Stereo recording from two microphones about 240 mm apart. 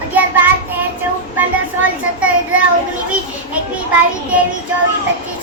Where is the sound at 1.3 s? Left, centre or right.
Centre.